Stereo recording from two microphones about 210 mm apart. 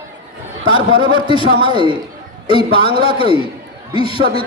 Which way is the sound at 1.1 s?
25° left (ahead or behind).